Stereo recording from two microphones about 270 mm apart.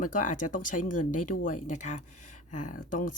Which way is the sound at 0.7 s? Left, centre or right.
Left.